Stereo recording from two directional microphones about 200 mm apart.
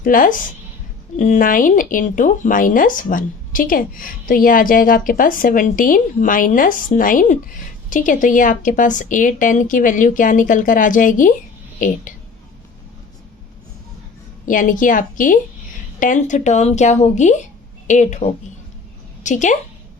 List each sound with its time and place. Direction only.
0.0 s a woman's voice: 45° left (ahead or behind)
14.4 s a woman's voice: 40° left (ahead or behind)